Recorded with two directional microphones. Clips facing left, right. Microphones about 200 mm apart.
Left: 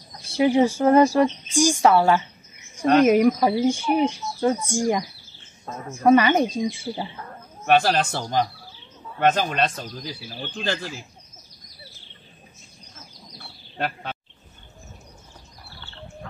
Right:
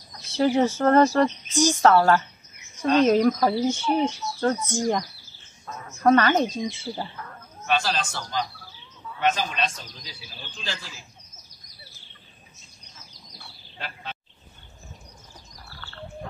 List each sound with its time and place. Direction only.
0.2 s a woman's voice: 10° left (ahead or behind)
5.7 s a woman's voice: 30° left (ahead or behind)
6.0 s a woman's voice: 10° left (ahead or behind)
7.6 s speech: 60° left (ahead or behind)
9.2 s speech: 55° left (ahead or behind)
13.4 s bird: 60° left (ahead or behind)